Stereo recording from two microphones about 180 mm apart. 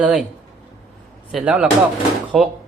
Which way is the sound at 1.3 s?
5° right (ahead or behind).